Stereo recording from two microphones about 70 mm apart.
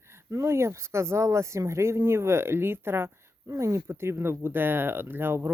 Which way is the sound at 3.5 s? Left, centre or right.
Right.